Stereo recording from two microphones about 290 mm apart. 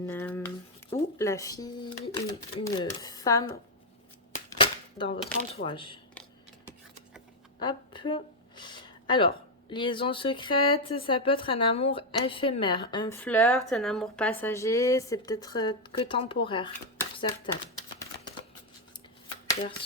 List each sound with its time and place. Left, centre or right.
0.1 s speech: centre
7.6 s speech: centre